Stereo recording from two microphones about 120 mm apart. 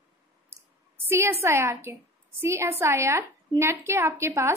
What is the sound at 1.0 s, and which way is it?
A woman's voice, 20° right (ahead or behind).